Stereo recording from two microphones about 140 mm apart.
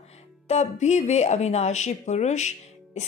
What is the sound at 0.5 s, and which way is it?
Speech, 55° left (ahead or behind).